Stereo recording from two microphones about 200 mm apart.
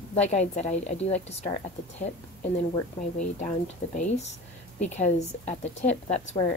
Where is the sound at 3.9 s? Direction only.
35° left (ahead or behind).